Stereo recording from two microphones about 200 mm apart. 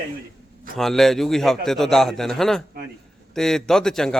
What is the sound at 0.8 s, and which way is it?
Speech, centre (ahead or behind).